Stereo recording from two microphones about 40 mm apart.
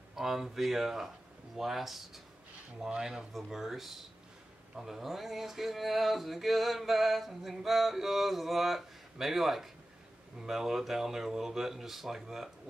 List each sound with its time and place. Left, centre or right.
0.1 s speech: centre
2.9 s speech: centre
3.3 s speech: centre